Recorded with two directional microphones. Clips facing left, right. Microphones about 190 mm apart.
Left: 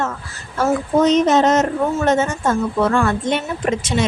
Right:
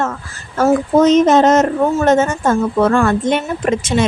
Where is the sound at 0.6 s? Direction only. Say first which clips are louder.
Right 4 dB; 45° right (ahead or behind).